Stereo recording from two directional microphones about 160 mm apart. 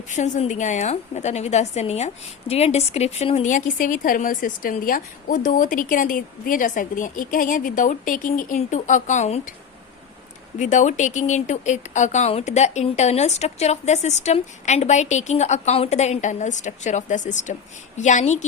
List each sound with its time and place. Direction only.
0.1 s a woman's voice: 50° left (ahead or behind)
10.6 s a woman's voice: 50° left (ahead or behind)